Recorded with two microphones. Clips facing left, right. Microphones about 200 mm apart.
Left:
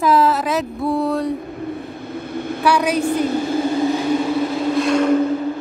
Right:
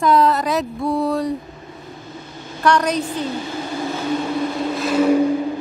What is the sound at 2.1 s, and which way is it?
Vehicle, 60° left (ahead or behind).